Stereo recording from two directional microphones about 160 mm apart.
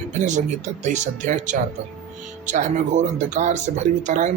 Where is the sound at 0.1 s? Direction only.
50° right (ahead or behind).